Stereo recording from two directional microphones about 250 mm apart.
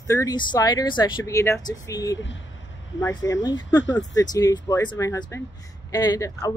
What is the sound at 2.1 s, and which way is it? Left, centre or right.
Speech, left.